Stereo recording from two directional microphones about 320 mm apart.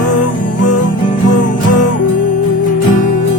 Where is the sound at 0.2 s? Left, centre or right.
Left.